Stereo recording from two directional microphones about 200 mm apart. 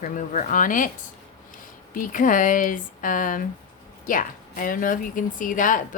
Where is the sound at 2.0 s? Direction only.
40° left (ahead or behind).